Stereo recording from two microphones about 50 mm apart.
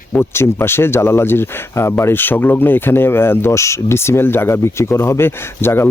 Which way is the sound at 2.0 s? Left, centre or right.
Left.